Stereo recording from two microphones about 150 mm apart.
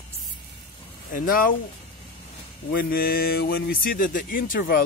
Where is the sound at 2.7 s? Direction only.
90° left.